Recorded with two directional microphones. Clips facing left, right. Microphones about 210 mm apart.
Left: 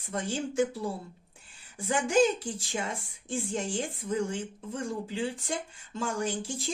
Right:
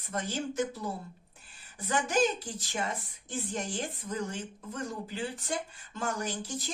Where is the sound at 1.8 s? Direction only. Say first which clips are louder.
Left 4 dB; 30° left (ahead or behind).